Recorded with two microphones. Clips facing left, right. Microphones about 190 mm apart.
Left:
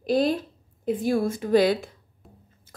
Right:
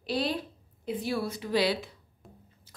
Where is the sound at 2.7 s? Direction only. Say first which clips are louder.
Left 8 dB; 50° left (ahead or behind).